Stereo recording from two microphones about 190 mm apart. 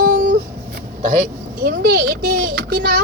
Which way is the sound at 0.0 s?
45° right (ahead or behind).